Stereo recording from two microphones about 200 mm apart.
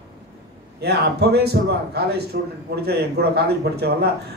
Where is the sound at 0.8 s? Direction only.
55° right (ahead or behind).